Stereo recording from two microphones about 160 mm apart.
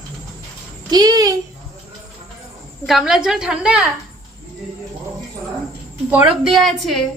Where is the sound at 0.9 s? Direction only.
25° right (ahead or behind).